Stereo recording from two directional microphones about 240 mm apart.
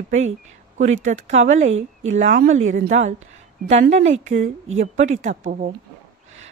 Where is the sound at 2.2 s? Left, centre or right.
Right.